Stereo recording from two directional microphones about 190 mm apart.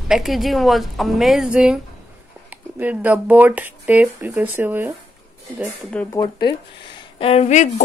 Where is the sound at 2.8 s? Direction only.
10° right (ahead or behind).